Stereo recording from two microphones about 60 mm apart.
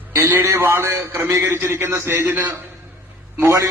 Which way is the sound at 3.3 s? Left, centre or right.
Right.